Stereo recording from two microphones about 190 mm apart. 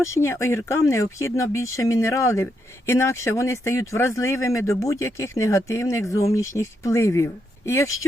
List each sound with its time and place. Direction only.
0.0 s speech: 15° left (ahead or behind)